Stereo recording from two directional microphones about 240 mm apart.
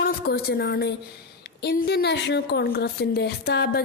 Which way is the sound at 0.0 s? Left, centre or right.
Left.